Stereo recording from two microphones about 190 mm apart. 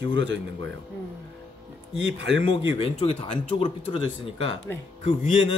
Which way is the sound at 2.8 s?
30° left (ahead or behind).